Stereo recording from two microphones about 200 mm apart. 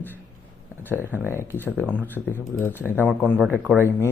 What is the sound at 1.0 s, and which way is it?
Speech, 10° right (ahead or behind).